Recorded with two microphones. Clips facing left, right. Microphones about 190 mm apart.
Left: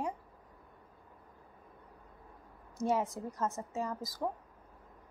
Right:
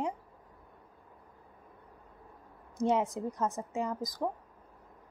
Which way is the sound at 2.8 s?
20° right (ahead or behind).